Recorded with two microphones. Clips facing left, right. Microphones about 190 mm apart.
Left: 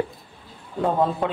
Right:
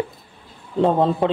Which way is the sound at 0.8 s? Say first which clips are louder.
Right 4 dB; 25° right (ahead or behind).